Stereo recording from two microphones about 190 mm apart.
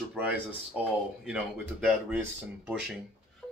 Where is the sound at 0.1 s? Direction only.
10° right (ahead or behind).